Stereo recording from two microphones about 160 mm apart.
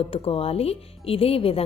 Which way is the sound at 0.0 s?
35° left (ahead or behind).